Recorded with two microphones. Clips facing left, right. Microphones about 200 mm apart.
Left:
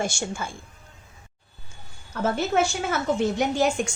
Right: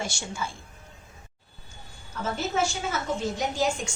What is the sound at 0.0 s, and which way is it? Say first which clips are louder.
Speech: left 5 dB; 50° left (ahead or behind).